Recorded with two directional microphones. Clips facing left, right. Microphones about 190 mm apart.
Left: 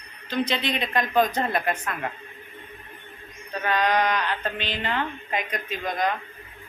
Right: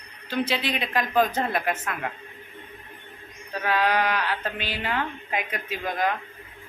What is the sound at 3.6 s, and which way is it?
A woman's voice, 5° right (ahead or behind).